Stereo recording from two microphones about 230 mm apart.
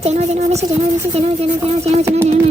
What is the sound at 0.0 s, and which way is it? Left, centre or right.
A woman's voice, right.